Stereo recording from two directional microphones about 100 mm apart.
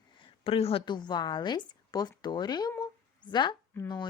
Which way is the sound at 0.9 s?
45° left (ahead or behind).